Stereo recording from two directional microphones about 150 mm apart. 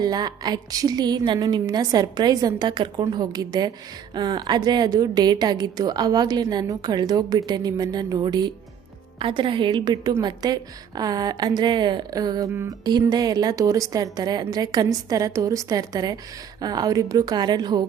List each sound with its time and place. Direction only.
0.0 s a woman's voice: 25° right (ahead or behind)